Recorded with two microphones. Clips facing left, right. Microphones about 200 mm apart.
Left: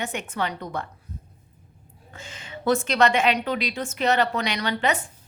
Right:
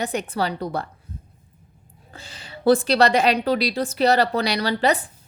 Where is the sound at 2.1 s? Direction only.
35° right (ahead or behind).